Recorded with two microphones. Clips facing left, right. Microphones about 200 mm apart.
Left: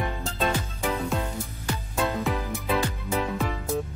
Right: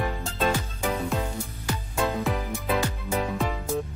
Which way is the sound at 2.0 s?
Centre (ahead or behind).